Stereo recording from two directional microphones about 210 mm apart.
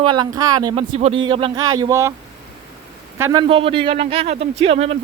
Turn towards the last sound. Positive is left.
turn(degrees=-30)  # may be behind; listen again after turning